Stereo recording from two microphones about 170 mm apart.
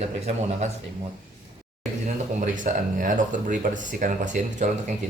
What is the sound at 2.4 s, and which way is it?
Speech, 50° right (ahead or behind).